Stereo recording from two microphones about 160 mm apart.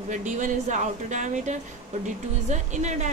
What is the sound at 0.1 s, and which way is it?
Speech, 50° right (ahead or behind).